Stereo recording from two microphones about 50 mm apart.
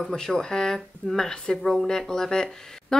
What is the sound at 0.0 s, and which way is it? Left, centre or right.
Speech, centre.